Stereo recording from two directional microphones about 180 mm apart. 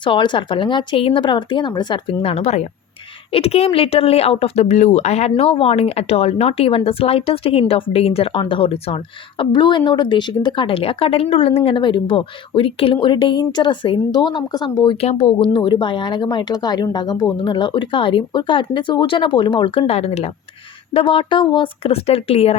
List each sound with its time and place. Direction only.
0.0 s speech: 25° left (ahead or behind)